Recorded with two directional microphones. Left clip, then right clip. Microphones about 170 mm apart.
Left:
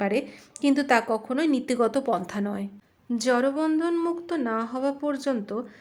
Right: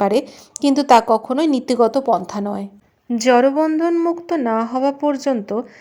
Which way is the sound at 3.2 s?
35° right (ahead or behind).